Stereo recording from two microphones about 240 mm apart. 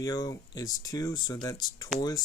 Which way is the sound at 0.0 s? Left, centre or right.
Centre.